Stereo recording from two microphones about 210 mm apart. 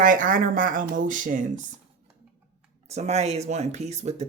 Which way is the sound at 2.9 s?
30° right (ahead or behind).